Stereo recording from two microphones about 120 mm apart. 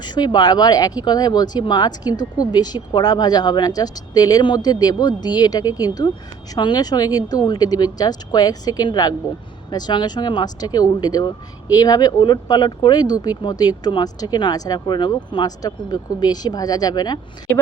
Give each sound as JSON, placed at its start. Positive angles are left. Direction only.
{"t": 0.0, "sound": "speech", "side_deg": 35}